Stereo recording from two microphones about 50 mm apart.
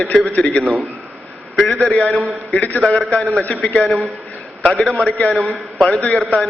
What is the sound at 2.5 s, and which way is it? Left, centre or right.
Speech, left.